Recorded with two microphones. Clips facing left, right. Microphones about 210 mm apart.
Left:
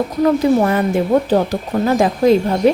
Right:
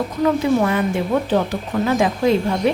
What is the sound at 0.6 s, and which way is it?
A woman's voice, 40° left (ahead or behind).